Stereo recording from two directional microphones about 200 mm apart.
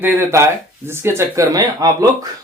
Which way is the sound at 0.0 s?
10° right (ahead or behind).